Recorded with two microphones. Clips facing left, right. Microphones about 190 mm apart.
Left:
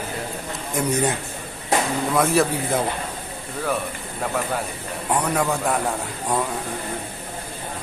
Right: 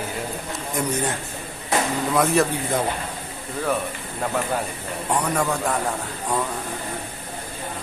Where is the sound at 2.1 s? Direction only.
Centre (ahead or behind).